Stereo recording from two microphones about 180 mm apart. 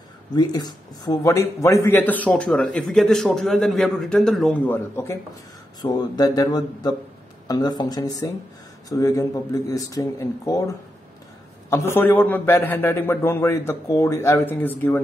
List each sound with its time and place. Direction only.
0.3 s a man's voice: 20° left (ahead or behind)
5.8 s speech: 20° left (ahead or behind)
11.7 s a man's voice: 15° left (ahead or behind)